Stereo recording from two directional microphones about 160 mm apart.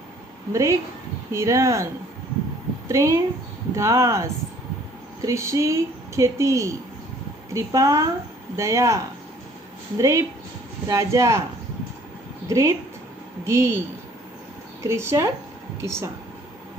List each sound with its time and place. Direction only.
0.5 s a woman's voice: 20° right (ahead or behind)
2.9 s a woman's voice: 20° right (ahead or behind)
12.4 s speech: 20° right (ahead or behind)